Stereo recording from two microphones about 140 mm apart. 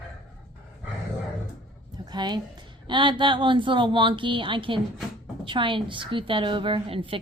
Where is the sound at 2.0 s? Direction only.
30° right (ahead or behind).